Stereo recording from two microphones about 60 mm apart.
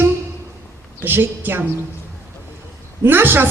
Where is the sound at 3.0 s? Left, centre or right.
Right.